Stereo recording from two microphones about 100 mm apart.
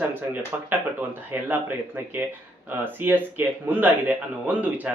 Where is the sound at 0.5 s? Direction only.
15° right (ahead or behind).